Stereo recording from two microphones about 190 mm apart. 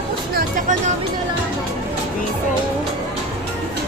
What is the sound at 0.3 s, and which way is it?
Music, 45° right (ahead or behind).